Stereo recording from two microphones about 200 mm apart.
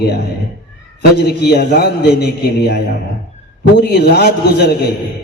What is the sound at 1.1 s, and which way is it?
A man's voice, 55° left (ahead or behind).